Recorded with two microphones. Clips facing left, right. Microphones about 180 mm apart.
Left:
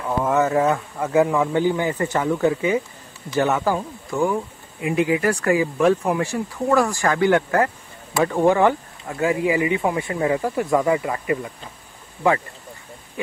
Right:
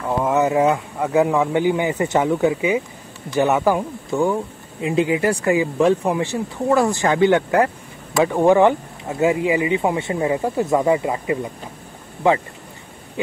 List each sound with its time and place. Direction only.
0.3 s speech: 15° right (ahead or behind)